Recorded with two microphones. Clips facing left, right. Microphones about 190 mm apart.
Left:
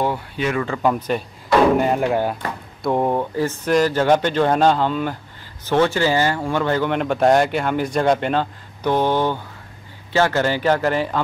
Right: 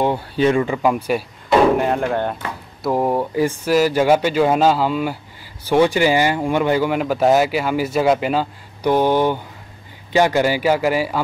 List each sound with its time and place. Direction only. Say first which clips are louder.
0.0 s speech: right 5 dB; 25° right (ahead or behind)
0.7 s speech: right 2 dB; 10° right (ahead or behind)
1.8 s speech: left 1 dB; 5° left (ahead or behind)
2.8 s speech: right 1 dB; 5° right (ahead or behind)